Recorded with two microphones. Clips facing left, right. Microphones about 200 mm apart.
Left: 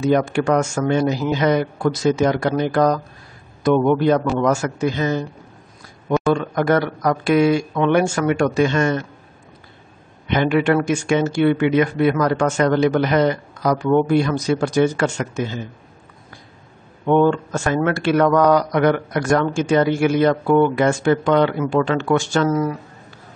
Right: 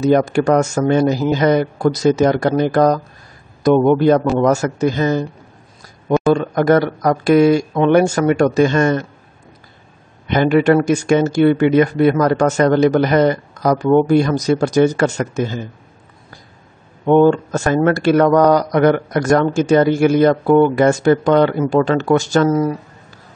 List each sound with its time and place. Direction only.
0.0 s speech: 40° right (ahead or behind)
6.3 s speech: 40° right (ahead or behind)
10.2 s speech: 40° right (ahead or behind)
17.0 s speech: 40° right (ahead or behind)